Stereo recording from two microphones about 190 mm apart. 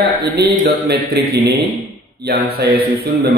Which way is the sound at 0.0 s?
55° right (ahead or behind).